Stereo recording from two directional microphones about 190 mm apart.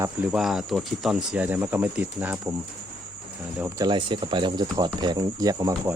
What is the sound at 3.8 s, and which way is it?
Speech, 25° right (ahead or behind).